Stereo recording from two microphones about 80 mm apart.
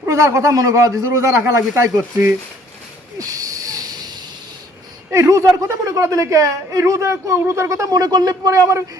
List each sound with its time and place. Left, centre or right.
0.0 s a woman's voice: right
3.2 s a sound: right
5.1 s a woman's voice: right